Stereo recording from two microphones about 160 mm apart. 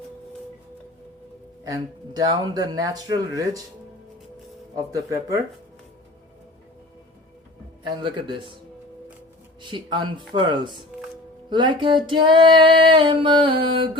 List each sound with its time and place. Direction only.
1.6 s speech: 25° right (ahead or behind)
4.7 s speech: 20° right (ahead or behind)
9.6 s speech: 30° right (ahead or behind)
11.4 s music: 30° right (ahead or behind)